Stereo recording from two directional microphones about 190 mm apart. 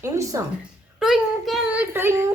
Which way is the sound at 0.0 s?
15° right (ahead or behind).